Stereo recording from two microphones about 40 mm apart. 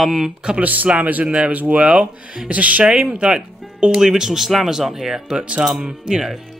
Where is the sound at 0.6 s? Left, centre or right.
Right.